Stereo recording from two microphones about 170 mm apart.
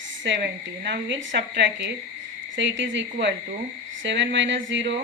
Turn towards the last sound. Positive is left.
turn(degrees=-90)